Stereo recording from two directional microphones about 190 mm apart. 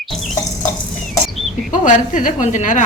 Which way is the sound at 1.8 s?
45° left (ahead or behind).